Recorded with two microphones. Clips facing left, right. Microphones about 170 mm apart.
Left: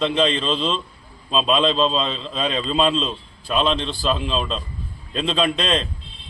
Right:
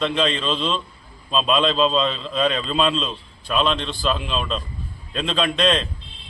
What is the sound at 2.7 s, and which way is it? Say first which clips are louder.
Speech: left 4 dB; 30° left (ahead or behind).